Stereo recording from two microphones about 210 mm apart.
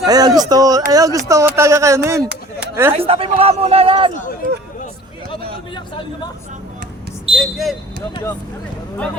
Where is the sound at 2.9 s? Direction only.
25° right (ahead or behind).